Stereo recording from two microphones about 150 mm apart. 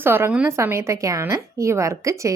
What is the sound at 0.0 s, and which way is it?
A woman's voice, 15° right (ahead or behind).